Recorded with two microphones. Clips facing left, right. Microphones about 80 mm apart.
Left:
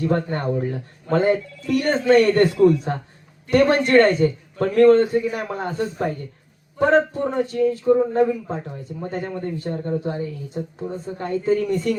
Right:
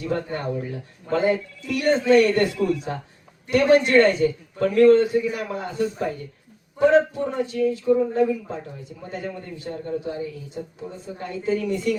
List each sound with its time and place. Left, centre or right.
0.0 s a man's voice: left